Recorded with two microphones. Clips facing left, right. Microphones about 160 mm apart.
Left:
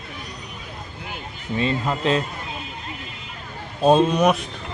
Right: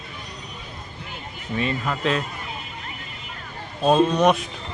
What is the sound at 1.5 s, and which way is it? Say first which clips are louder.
Speech: left 2 dB; 30° left (ahead or behind).